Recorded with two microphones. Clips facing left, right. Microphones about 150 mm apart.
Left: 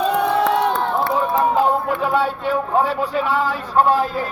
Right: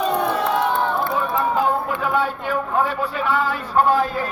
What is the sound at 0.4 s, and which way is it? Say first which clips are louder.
Crowd: left 2 dB; 85° left.